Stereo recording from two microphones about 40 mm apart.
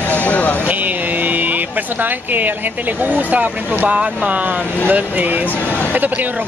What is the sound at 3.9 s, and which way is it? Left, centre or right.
Speech, right.